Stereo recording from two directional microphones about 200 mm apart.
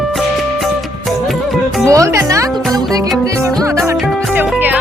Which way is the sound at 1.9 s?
15° right (ahead or behind).